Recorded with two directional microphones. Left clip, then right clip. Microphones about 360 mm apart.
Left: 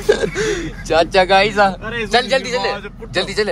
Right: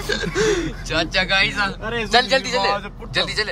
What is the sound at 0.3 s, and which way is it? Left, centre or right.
Speech, centre.